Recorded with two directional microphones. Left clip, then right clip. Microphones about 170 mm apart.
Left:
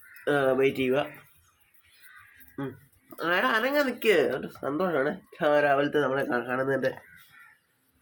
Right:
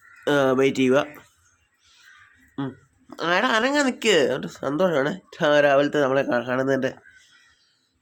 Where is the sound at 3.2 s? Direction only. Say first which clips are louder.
Right 4 dB; 35° right (ahead or behind).